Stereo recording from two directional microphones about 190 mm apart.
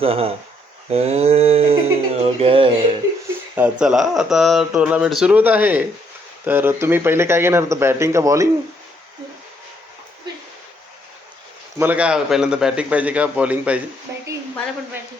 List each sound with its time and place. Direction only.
0.0 s speech: 30° right (ahead or behind)
3.5 s speech: 5° right (ahead or behind)
11.8 s speech: 10° right (ahead or behind)